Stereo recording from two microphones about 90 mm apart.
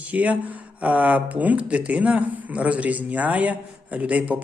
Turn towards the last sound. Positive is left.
turn(degrees=-15)  # may be behind; listen again after turning